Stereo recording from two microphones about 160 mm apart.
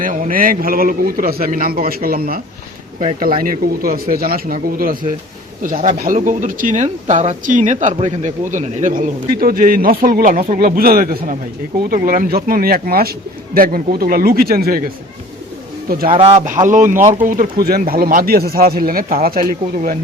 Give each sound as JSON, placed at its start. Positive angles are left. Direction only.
{"t": 0.0, "sound": "a man's voice", "side_deg": -60}
{"t": 16.0, "sound": "speech", "side_deg": -35}
{"t": 16.6, "sound": "a man's voice", "side_deg": -50}